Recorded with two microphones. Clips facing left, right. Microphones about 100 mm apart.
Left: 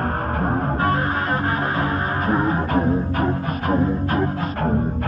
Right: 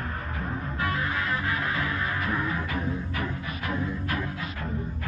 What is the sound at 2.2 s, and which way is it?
Music, 45° left (ahead or behind).